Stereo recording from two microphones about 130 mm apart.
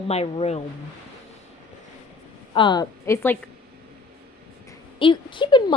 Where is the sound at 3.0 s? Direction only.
20° left (ahead or behind).